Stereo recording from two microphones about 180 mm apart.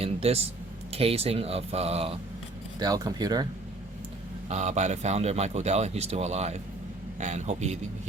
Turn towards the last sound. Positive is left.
turn(degrees=-40)  # may be behind; listen again after turning